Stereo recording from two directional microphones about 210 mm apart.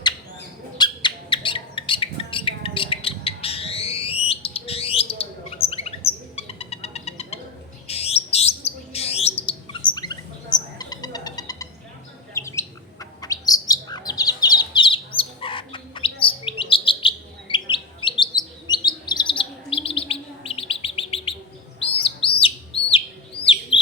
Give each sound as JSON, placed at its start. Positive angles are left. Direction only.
{"t": 0.8, "sound": "a sound", "side_deg": 25}
{"t": 4.3, "sound": "bird", "side_deg": 25}
{"t": 12.3, "sound": "chirp", "side_deg": 15}
{"t": 18.9, "sound": "bird", "side_deg": 20}
{"t": 22.0, "sound": "chirp", "side_deg": 25}
{"t": 23.5, "sound": "bird", "side_deg": 25}